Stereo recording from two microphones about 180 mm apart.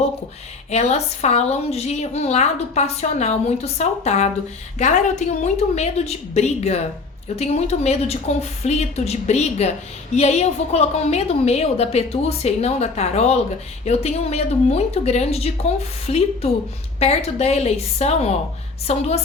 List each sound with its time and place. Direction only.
0.7 s a woman's voice: 35° left (ahead or behind)